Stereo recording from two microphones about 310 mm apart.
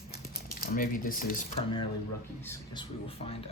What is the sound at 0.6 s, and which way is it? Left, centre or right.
Speech, left.